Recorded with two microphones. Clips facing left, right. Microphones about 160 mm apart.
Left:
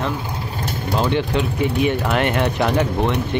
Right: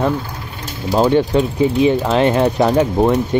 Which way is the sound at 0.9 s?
35° right (ahead or behind).